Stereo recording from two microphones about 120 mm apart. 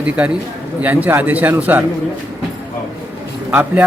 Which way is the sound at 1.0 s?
15° right (ahead or behind).